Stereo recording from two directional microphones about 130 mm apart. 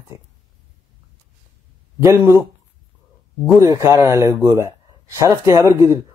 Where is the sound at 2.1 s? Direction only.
20° right (ahead or behind).